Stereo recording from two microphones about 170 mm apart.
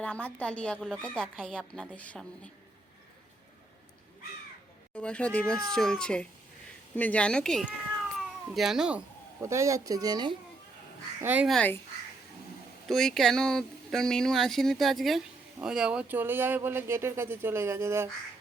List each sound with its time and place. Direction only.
0.0 s a woman's voice: 5° left (ahead or behind)
4.9 s a woman's voice: 5° left (ahead or behind)
9.4 s speech: 15° right (ahead or behind)
11.2 s speech: 10° right (ahead or behind)
11.4 s a woman's voice: 5° left (ahead or behind)
12.9 s a woman's voice: 5° left (ahead or behind); by 18.1 s 15° right (ahead or behind)